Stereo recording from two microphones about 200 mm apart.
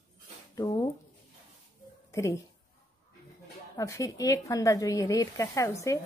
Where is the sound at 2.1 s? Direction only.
15° left (ahead or behind).